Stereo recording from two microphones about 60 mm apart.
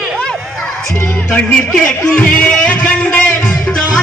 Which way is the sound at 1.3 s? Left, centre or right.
Left.